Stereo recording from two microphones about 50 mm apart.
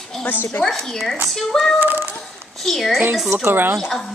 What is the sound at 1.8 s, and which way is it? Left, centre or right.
Speech, right.